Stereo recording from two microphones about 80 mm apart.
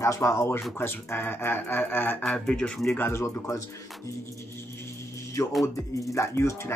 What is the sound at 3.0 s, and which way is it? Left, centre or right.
Speech, left.